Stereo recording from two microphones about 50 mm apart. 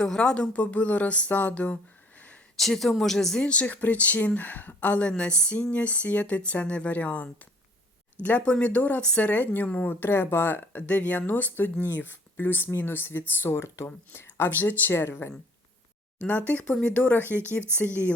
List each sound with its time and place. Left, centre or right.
0.0 s speech: centre
0.5 s speech: left
2.6 s speech: centre
3.4 s speech: left
8.4 s speech: left
10.8 s speech: left
14.9 s speech: left
16.5 s speech: left
17.2 s speech: left